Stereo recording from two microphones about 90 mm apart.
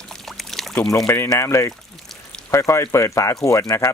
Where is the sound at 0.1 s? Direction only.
5° left (ahead or behind).